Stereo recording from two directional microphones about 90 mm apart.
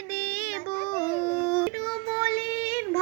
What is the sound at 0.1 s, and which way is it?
Child singing, 20° left (ahead or behind).